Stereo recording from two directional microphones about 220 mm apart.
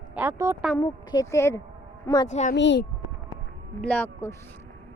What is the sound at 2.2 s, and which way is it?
Speech, 30° left (ahead or behind).